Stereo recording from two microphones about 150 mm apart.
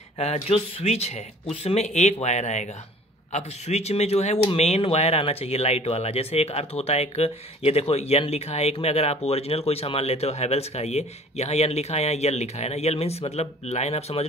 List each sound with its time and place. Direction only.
0.2 s speech: 45° left (ahead or behind)